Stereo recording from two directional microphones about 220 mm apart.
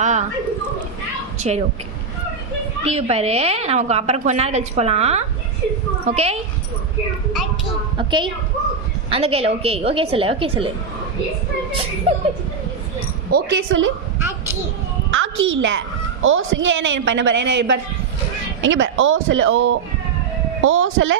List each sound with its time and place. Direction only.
0.0 s a sound: 35° right (ahead or behind)
1.4 s a woman's voice: 30° right (ahead or behind)
2.8 s a woman's voice: 30° right (ahead or behind)
7.9 s a woman's voice: 20° right (ahead or behind)
13.3 s a woman's voice: 55° right (ahead or behind)
15.1 s a woman's voice: 60° right (ahead or behind)